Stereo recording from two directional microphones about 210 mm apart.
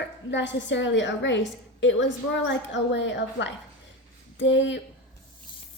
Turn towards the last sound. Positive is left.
turn(degrees=60)  # may be behind; listen again after turning